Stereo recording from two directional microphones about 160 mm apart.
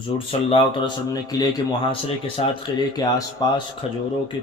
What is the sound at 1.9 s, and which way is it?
Speech, 35° left (ahead or behind).